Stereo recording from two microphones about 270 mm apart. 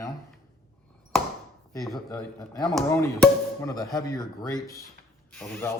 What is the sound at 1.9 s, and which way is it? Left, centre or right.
Speech, centre.